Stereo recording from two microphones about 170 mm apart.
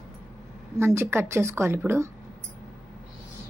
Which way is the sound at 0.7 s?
15° right (ahead or behind).